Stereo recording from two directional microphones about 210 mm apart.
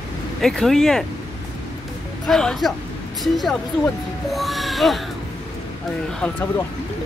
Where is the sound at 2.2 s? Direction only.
Centre (ahead or behind).